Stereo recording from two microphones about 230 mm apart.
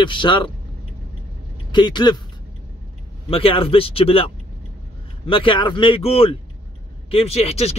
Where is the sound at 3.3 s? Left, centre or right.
Left.